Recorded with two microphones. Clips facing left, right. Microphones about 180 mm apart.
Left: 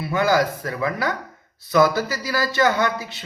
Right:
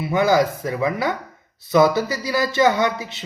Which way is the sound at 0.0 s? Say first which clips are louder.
Right 2 dB; 20° right (ahead or behind).